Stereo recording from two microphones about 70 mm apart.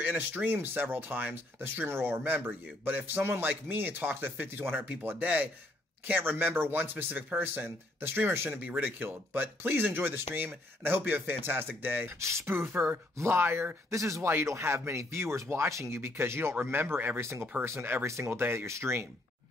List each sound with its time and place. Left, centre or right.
0.0 s speech: right
12.2 s speech: right
13.9 s speech: right
17.2 s speech: right
18.4 s speech: right